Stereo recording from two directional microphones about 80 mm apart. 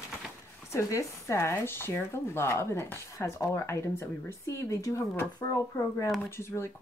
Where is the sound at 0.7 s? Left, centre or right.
Left.